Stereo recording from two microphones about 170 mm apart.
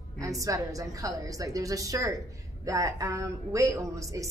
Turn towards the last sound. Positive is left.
turn(degrees=-20)  # may be behind; listen again after turning